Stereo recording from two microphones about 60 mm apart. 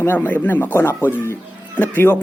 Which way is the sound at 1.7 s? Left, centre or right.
Left.